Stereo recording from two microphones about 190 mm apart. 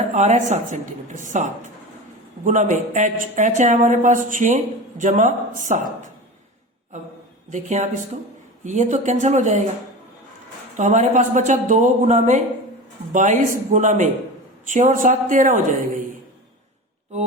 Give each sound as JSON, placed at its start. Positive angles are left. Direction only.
{"t": 0.1, "sound": "speech", "side_deg": -40}
{"t": 7.5, "sound": "speech", "side_deg": -40}
{"t": 10.8, "sound": "speech", "side_deg": -40}